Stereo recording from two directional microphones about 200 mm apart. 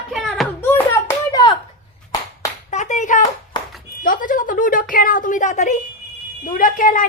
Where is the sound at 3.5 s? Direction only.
20° left (ahead or behind).